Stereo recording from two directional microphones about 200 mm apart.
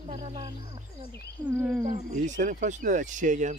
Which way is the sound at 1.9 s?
40° right (ahead or behind).